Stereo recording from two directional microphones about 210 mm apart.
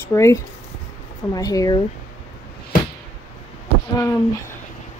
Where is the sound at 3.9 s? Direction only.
10° left (ahead or behind).